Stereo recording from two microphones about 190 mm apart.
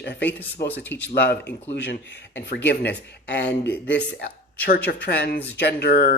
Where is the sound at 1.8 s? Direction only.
60° left (ahead or behind).